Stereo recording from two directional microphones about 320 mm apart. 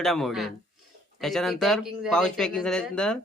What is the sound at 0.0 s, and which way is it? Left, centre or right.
Speech, centre.